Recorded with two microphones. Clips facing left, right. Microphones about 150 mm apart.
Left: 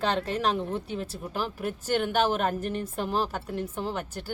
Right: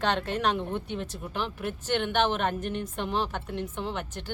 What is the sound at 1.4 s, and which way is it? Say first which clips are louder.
Speech: left 1 dB; 40° left (ahead or behind).